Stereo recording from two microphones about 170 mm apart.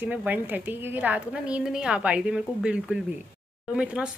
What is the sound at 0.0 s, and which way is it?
Speech, 10° right (ahead or behind).